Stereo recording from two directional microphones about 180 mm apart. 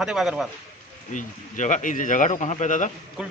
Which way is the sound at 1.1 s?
45° left (ahead or behind).